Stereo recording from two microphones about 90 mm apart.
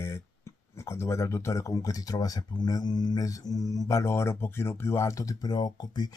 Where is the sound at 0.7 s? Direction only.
30° left (ahead or behind).